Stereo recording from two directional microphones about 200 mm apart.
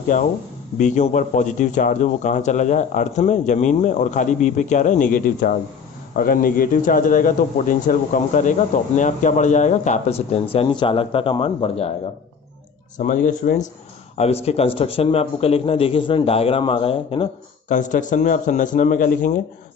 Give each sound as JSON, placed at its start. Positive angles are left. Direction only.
{"t": 0.1, "sound": "a man's voice", "side_deg": 40}
{"t": 12.9, "sound": "a man's voice", "side_deg": 40}
{"t": 17.6, "sound": "a man's voice", "side_deg": 40}